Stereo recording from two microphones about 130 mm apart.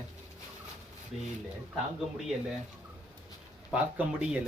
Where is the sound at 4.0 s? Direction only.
15° right (ahead or behind).